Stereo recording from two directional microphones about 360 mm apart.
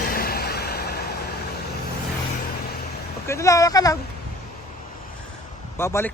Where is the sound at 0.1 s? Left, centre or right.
Left.